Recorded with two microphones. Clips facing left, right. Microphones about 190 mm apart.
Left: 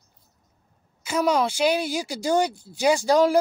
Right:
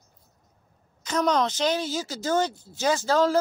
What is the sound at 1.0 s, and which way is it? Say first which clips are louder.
Speech: left 2 dB; 10° left (ahead or behind).